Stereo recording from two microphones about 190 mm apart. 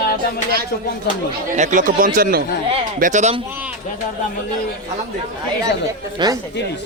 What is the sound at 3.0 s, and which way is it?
Speech, 40° right (ahead or behind).